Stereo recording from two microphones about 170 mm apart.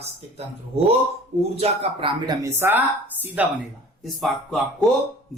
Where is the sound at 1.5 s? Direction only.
35° right (ahead or behind); by 3.5 s 10° right (ahead or behind).